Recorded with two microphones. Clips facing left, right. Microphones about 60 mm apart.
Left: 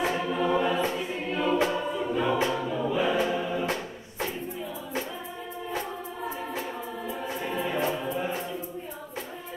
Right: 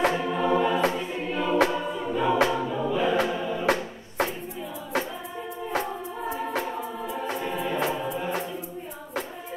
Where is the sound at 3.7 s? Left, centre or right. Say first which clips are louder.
Right 6 dB; right.